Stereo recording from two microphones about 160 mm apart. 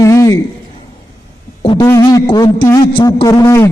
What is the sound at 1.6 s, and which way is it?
A man's voice, 30° left (ahead or behind).